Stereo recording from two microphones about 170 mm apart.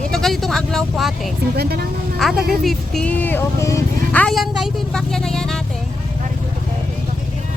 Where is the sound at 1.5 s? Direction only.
65° right (ahead or behind).